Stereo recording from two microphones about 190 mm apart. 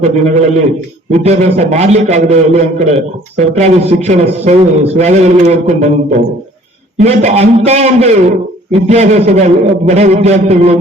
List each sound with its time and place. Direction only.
0.0 s a man's voice: 40° right (ahead or behind)